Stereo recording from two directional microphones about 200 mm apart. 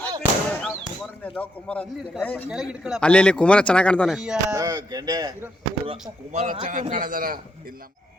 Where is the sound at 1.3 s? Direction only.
5° left (ahead or behind).